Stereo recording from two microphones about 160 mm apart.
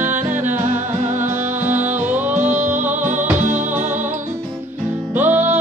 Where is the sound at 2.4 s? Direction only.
50° right (ahead or behind).